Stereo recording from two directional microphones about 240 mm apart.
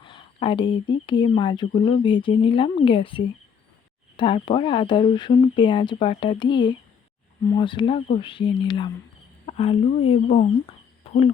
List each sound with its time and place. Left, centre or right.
0.0 s speech: left